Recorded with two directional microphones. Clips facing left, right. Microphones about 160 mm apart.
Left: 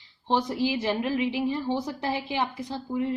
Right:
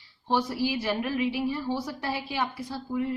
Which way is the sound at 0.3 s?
20° left (ahead or behind).